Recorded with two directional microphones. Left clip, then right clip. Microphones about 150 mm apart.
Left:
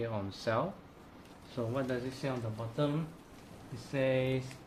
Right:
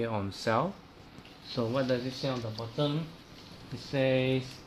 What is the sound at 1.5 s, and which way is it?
Speech, 80° right.